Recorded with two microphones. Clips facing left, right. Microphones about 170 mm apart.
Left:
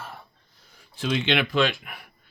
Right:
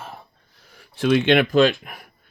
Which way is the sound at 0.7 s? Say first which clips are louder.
Right 9 dB; 65° right (ahead or behind).